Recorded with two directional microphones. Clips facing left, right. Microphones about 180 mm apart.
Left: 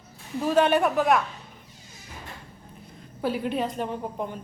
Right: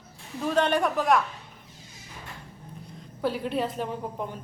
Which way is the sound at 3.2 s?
5° left (ahead or behind).